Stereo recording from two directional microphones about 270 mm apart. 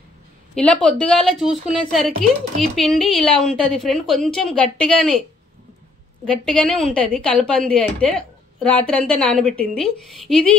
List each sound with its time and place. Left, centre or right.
0.6 s speech: centre
6.2 s speech: centre